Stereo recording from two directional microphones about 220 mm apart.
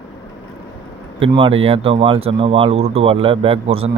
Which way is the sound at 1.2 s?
25° right (ahead or behind).